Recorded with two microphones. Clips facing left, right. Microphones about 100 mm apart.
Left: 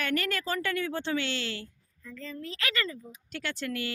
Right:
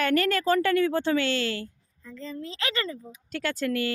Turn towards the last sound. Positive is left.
turn(degrees=-50)  # may be behind; listen again after turning